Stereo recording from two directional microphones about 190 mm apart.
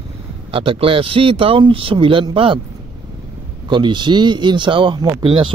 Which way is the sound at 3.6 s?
25° right (ahead or behind).